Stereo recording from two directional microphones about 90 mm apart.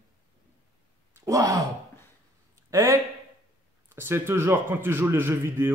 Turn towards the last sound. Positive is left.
turn(degrees=-25)  # may be behind; listen again after turning